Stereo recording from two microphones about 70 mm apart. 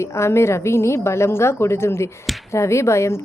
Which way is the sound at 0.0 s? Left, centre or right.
Left.